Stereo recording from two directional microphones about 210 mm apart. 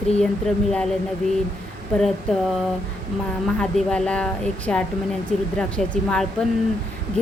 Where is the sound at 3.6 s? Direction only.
5° left (ahead or behind).